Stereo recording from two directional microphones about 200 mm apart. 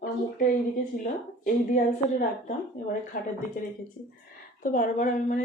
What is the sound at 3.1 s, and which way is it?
Speech, 40° left (ahead or behind).